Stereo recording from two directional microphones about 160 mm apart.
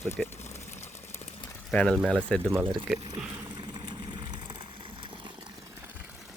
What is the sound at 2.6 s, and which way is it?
Speech, 30° right (ahead or behind).